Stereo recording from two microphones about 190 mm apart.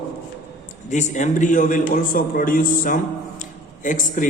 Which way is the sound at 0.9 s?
40° left (ahead or behind).